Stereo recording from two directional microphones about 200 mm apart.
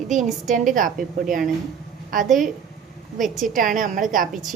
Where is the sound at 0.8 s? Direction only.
40° right (ahead or behind).